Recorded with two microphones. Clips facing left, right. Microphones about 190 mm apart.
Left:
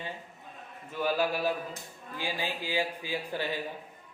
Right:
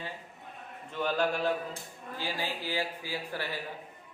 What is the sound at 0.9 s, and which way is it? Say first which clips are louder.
Speech: left 1 dB; 5° left (ahead or behind).